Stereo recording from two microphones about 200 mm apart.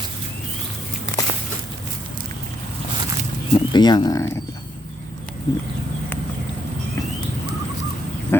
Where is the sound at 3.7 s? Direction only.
20° left (ahead or behind).